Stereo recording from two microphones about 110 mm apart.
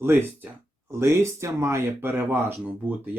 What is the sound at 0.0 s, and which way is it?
Speech, 20° right (ahead or behind).